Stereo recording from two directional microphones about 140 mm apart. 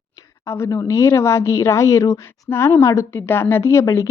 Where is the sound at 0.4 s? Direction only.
20° left (ahead or behind).